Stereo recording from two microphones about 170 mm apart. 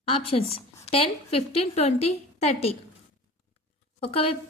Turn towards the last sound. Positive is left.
turn(degrees=35)  # may be behind; listen again after turning